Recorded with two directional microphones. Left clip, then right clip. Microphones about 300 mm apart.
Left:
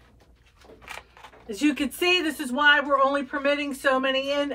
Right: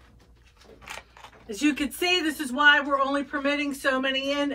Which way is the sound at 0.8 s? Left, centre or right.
Centre.